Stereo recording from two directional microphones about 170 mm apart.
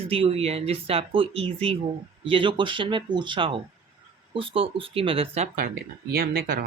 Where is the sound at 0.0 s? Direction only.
35° right (ahead or behind).